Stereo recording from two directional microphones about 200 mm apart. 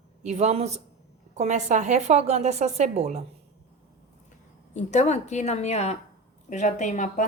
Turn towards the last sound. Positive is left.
turn(degrees=40)  # may be behind; listen again after turning